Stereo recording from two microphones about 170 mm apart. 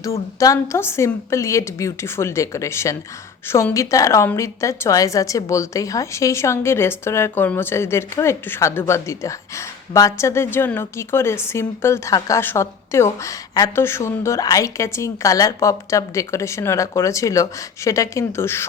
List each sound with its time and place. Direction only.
0.0 s a woman's voice: 20° left (ahead or behind)